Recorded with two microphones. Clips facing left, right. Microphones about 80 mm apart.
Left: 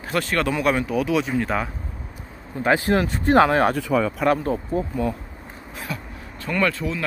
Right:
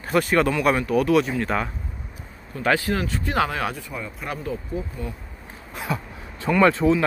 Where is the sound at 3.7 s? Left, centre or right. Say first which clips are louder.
Left 12 dB; left.